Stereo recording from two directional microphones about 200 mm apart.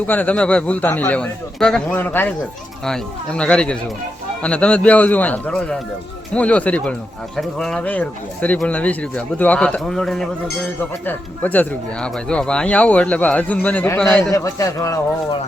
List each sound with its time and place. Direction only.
0.1 s speech: 10° left (ahead or behind)
14.3 s speech: 15° left (ahead or behind)